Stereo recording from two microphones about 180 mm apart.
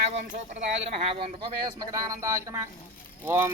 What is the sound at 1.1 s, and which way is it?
Speech, 30° right (ahead or behind).